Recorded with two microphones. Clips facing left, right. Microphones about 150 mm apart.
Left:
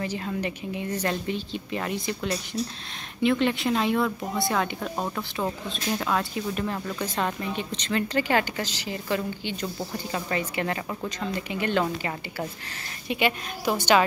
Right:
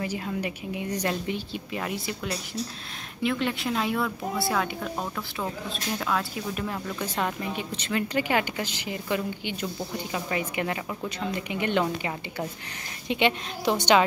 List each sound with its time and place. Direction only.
0.0 s a woman's voice: 10° right (ahead or behind)
4.9 s speech: 10° left (ahead or behind); by 11.8 s 20° right (ahead or behind)
13.1 s a woman's voice: 25° right (ahead or behind)